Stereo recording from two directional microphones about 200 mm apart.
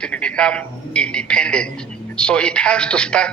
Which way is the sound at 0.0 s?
5° left (ahead or behind).